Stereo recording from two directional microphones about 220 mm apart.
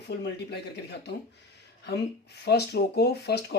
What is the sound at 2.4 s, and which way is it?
Speech, 50° left (ahead or behind).